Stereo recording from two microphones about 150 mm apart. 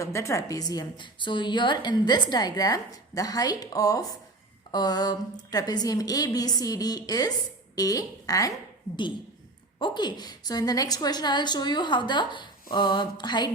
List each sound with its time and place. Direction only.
0.0 s a woman's voice: 20° left (ahead or behind)
9.7 s a woman's voice: 30° left (ahead or behind)